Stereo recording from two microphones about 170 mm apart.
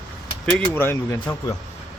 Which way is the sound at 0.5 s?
10° left (ahead or behind).